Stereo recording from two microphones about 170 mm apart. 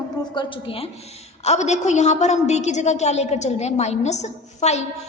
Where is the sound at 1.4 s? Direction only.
40° left (ahead or behind).